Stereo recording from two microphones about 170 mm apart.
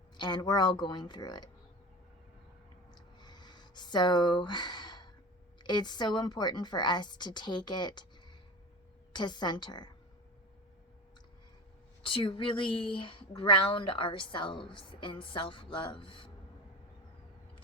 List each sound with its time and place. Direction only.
0.2 s speech: 25° left (ahead or behind)
2.9 s a sound: 25° left (ahead or behind)
5.6 s speech: 25° left (ahead or behind)
9.1 s speech: 25° left (ahead or behind)
12.0 s speech: 30° left (ahead or behind)